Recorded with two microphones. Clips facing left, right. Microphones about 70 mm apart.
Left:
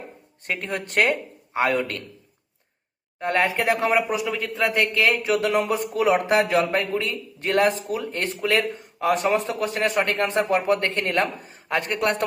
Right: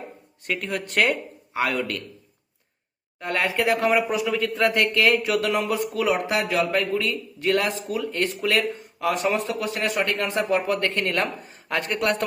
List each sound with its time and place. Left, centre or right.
0.4 s speech: left
3.2 s a man's voice: left